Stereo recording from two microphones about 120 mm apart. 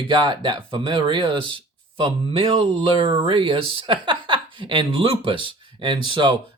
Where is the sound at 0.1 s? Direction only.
40° right (ahead or behind).